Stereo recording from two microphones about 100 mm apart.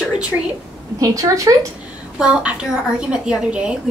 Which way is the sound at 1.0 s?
35° right (ahead or behind).